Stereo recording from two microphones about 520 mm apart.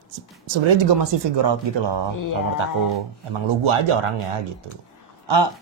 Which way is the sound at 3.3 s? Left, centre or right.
Right.